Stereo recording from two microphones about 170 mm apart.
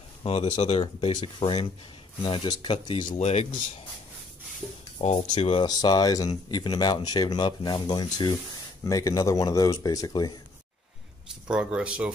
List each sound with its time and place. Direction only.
0.2 s speech: 35° left (ahead or behind)
3.2 s speech: 40° left (ahead or behind)
5.0 s speech: 40° left (ahead or behind)
5.7 s speech: 25° left (ahead or behind)
11.4 s speech: 5° right (ahead or behind)